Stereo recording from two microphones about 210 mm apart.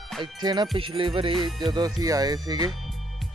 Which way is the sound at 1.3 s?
Centre (ahead or behind).